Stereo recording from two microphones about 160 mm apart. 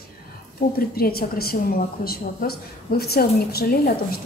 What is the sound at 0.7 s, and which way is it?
A woman's voice, 70° left (ahead or behind).